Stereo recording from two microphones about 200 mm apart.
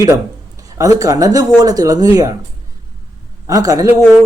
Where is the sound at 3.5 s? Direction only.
15° right (ahead or behind).